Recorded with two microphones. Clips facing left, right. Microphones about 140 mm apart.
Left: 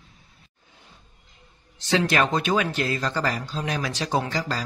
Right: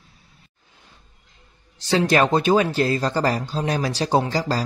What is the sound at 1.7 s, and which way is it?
Speech, 35° right (ahead or behind).